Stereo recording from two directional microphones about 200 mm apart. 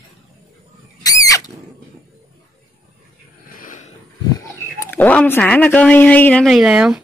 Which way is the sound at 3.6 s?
40° left (ahead or behind).